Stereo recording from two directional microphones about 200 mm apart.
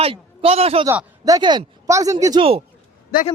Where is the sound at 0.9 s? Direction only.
15° right (ahead or behind).